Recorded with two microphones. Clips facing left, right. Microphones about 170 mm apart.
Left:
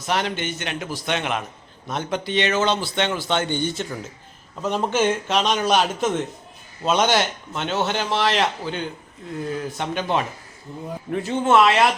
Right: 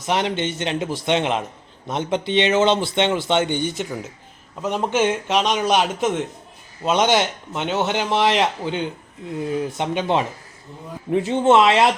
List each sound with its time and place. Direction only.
0.1 s a man's voice: 25° right (ahead or behind)